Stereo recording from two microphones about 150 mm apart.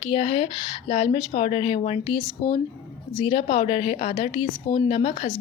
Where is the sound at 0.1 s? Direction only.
35° left (ahead or behind).